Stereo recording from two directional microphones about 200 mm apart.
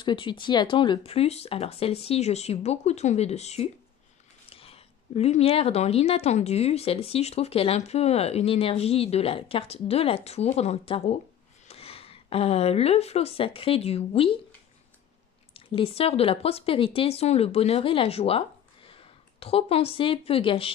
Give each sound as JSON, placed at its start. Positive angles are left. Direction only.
{"t": 0.0, "sound": "a woman's voice", "side_deg": 25}
{"t": 15.5, "sound": "speech", "side_deg": 30}
{"t": 19.4, "sound": "speech", "side_deg": 30}